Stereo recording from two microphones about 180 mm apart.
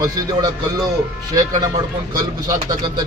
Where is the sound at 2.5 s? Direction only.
20° right (ahead or behind).